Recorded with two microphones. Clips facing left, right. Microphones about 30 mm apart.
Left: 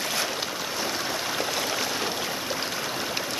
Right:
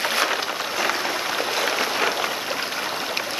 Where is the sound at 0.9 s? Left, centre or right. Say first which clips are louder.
Right 4 dB; right.